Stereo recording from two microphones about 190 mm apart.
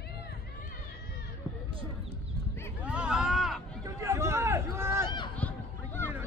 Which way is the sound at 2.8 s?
5° right (ahead or behind).